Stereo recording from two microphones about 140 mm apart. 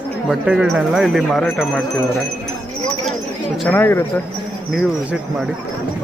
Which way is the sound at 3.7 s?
15° left (ahead or behind).